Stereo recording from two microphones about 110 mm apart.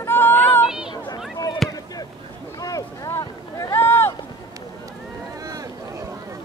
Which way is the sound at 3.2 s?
30° left (ahead or behind).